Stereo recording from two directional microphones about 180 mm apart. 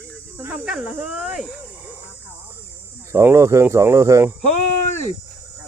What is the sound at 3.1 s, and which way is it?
Speech, 15° right (ahead or behind).